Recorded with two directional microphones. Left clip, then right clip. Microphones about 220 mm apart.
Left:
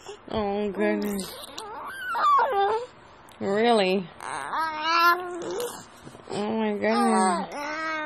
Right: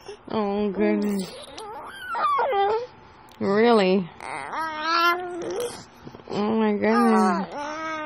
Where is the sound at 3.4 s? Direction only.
15° right (ahead or behind).